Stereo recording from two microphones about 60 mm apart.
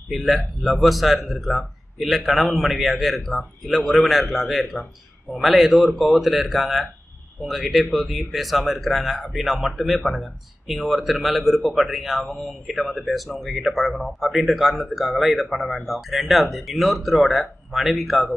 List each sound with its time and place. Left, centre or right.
0.1 s speech: centre